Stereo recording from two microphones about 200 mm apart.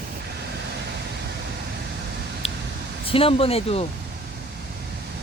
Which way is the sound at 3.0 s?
25° left (ahead or behind).